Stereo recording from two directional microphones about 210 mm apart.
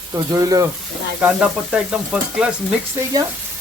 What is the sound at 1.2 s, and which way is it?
Frying, 5° right (ahead or behind).